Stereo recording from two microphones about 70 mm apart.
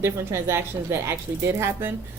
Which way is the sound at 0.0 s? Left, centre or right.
Right.